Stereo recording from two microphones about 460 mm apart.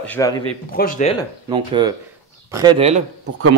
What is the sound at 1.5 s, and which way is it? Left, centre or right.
Speech, centre.